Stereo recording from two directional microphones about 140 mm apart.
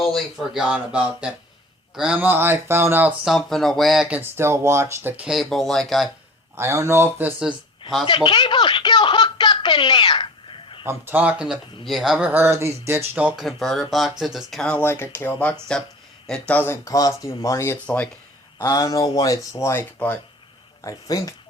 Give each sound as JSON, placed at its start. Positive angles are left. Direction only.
{"t": 0.0, "sound": "speech", "side_deg": 0}
{"t": 4.2, "sound": "speech", "side_deg": -15}
{"t": 6.6, "sound": "speech", "side_deg": -20}
{"t": 8.0, "sound": "speech", "side_deg": 35}
{"t": 10.8, "sound": "speech", "side_deg": -15}
{"t": 12.3, "sound": "speech", "side_deg": -15}
{"t": 13.4, "sound": "speech", "side_deg": 0}
{"t": 18.6, "sound": "speech", "side_deg": 25}